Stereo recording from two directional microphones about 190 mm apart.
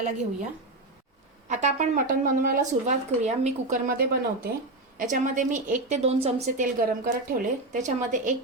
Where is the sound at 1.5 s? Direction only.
40° right (ahead or behind).